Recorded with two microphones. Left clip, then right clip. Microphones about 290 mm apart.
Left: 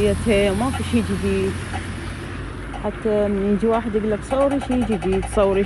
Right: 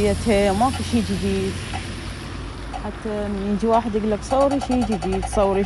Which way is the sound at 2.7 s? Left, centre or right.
Right.